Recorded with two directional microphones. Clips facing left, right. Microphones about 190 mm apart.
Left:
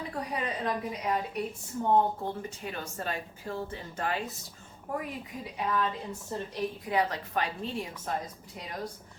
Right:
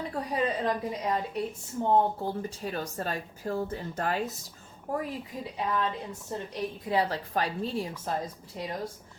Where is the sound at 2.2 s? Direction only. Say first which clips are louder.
Right 3 dB; 35° right (ahead or behind).